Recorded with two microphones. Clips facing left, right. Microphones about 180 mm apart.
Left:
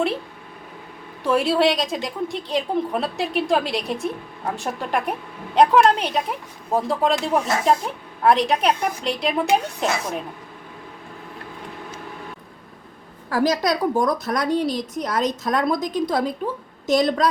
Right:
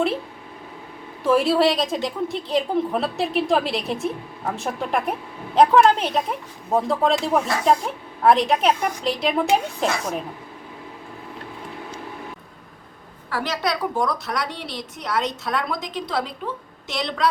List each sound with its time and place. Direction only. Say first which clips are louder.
1.2 s a woman's voice: right 1 dB; centre (ahead or behind)
13.3 s a woman's voice: left 5 dB; 40° left (ahead or behind)